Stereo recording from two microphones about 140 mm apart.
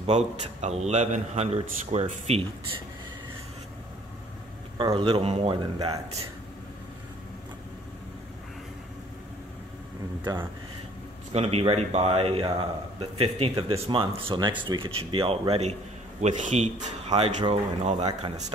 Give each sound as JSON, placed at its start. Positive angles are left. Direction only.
{"t": 0.0, "sound": "a man's voice", "side_deg": -55}
{"t": 4.7, "sound": "speech", "side_deg": -35}
{"t": 11.3, "sound": "speech", "side_deg": -45}
{"t": 16.2, "sound": "a man's voice", "side_deg": -55}
{"t": 17.2, "sound": "a man's voice", "side_deg": -45}